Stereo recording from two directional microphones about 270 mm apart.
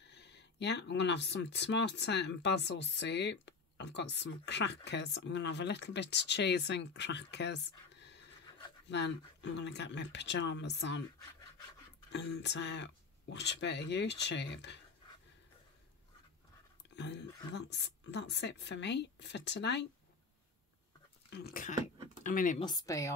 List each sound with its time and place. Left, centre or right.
0.0 s speech: left
12.1 s speech: left
16.9 s speech: left
21.3 s speech: left
22.7 s speech: centre